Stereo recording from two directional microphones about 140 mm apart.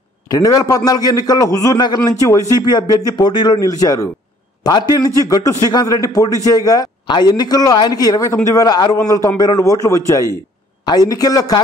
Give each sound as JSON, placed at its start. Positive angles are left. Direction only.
{"t": 0.3, "sound": "a man's voice", "side_deg": 25}